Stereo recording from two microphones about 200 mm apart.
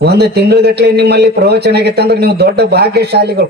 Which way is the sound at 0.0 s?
55° right (ahead or behind).